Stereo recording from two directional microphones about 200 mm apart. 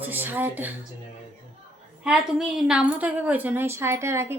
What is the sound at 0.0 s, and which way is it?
Speech, 10° right (ahead or behind).